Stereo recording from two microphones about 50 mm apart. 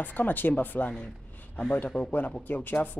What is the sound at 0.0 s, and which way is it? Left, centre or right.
Speech, left.